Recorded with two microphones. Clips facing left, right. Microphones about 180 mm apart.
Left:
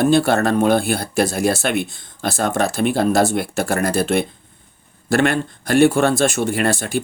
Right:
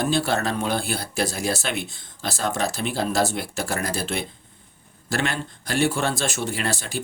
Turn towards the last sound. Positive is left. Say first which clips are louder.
# left 8 dB
turn(degrees=55)  # may be behind; listen again after turning